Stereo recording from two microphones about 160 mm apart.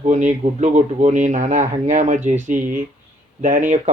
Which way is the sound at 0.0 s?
50° right (ahead or behind).